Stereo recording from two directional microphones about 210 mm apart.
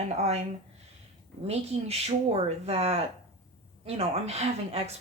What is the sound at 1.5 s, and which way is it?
Speech, 30° right (ahead or behind).